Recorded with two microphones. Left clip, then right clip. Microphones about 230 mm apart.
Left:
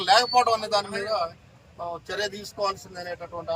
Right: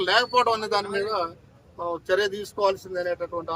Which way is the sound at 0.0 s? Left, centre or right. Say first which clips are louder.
Left 1 dB; centre.